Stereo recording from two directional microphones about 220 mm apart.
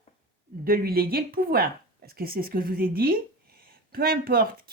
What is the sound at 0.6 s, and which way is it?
A woman's voice, 40° right (ahead or behind).